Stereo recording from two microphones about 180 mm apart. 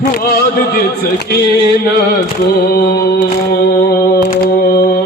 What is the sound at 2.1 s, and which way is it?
Mantra, 55° left (ahead or behind).